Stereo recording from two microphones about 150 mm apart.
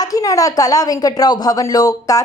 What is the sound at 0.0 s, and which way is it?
A woman's voice, 25° left (ahead or behind).